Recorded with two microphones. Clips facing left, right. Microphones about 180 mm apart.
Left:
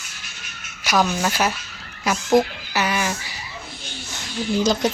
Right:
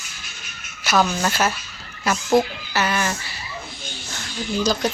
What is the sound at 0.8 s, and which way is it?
Speech, 10° left (ahead or behind).